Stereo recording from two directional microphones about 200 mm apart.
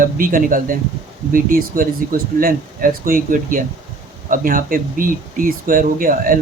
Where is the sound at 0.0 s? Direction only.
45° right (ahead or behind).